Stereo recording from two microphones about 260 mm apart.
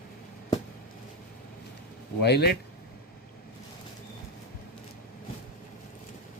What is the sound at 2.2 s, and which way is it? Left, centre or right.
Speech, left.